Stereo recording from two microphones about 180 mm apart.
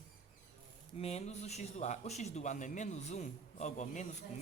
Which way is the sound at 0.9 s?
35° left (ahead or behind).